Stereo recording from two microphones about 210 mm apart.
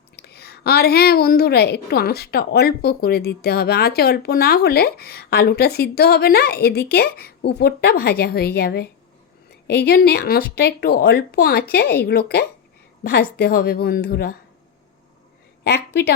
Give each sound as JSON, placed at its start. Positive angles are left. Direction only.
{"t": 0.2, "sound": "a woman's voice", "side_deg": 50}
{"t": 15.6, "sound": "a woman's voice", "side_deg": 50}